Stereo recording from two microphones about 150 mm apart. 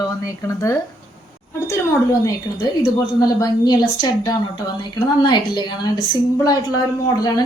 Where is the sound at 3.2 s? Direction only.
25° left (ahead or behind).